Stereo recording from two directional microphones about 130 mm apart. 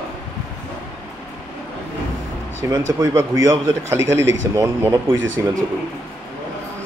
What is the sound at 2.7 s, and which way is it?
Speech, 25° right (ahead or behind).